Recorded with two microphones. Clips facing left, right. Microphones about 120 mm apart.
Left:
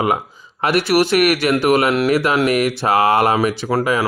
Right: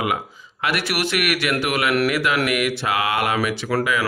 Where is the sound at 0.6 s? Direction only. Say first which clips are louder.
Left 8 dB; 40° left (ahead or behind).